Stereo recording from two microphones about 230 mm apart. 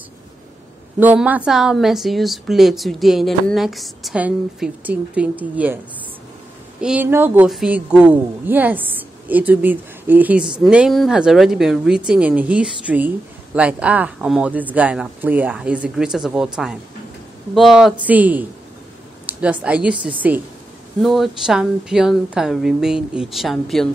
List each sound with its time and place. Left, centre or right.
0.9 s a woman's voice: centre
6.8 s a woman's voice: centre